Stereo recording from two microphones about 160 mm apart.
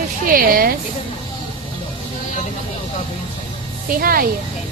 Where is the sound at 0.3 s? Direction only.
65° right (ahead or behind).